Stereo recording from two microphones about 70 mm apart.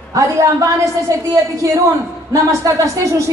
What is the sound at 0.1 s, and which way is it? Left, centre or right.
A man's voice, right.